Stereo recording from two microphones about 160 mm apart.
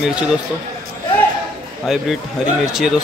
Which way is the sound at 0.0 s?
5° right (ahead or behind).